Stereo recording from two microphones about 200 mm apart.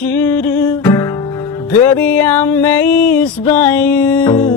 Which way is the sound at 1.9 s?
10° left (ahead or behind).